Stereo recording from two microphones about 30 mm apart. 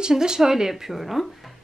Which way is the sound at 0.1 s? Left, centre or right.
Centre.